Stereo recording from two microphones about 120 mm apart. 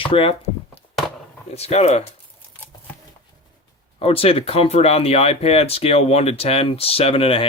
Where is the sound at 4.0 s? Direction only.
55° left (ahead or behind).